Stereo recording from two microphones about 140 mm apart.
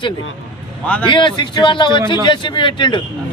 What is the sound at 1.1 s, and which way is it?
Speech, 35° left (ahead or behind).